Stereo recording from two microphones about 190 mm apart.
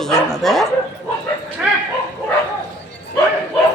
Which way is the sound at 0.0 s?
Centre (ahead or behind).